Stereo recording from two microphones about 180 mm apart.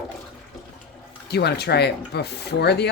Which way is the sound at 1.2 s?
65° left (ahead or behind).